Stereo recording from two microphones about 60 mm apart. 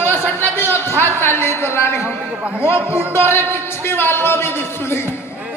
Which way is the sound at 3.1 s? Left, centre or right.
Left.